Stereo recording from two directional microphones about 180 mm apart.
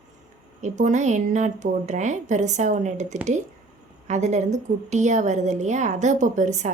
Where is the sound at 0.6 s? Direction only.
40° right (ahead or behind).